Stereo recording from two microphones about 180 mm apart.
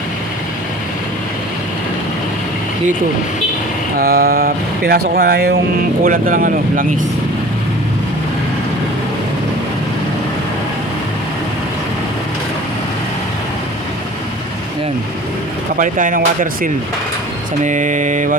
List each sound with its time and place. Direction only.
3.9 s speech: 55° right (ahead or behind)
6.0 s speech: 50° right (ahead or behind)
15.8 s speech: 45° right (ahead or behind)